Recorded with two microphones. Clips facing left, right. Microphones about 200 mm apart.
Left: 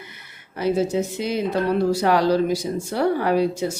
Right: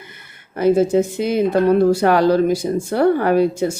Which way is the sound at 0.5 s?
50° right (ahead or behind).